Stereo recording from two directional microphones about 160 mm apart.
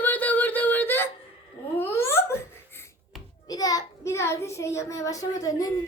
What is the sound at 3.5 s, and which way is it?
A child's voice, 25° left (ahead or behind).